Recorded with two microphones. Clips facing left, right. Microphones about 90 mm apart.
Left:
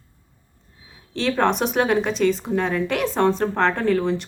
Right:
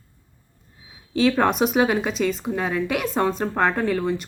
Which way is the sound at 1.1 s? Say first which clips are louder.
Right 1 dB; 5° right (ahead or behind).